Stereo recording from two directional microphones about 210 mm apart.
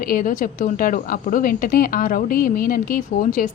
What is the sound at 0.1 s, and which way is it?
A woman's voice, 40° left (ahead or behind).